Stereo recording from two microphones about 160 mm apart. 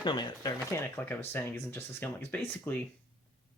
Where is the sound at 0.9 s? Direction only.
10° left (ahead or behind).